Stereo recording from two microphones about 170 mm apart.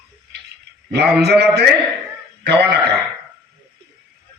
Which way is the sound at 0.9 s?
75° right (ahead or behind).